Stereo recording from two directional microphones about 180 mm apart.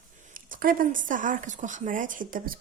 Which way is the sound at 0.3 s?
50° right (ahead or behind).